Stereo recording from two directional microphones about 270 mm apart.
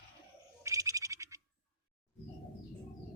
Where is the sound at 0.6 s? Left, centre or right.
Centre.